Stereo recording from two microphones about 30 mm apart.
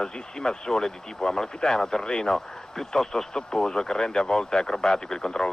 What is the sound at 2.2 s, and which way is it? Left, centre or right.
Speech, centre.